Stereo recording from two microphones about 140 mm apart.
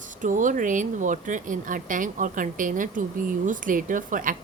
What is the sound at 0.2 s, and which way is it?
A woman's voice, 65° right (ahead or behind).